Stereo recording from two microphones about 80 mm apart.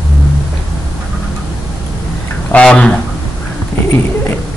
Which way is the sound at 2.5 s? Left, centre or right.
Centre.